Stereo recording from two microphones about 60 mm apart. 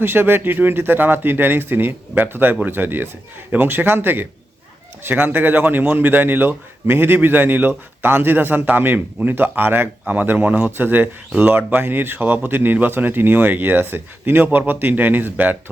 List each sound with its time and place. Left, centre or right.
0.0 s speech: right
10.7 s speech: right